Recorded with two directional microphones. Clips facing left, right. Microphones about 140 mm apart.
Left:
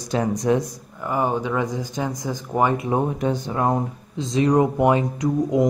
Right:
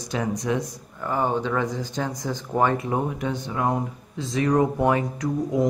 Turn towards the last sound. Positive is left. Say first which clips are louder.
# left 3 dB
turn(degrees=20)  # may be behind; listen again after turning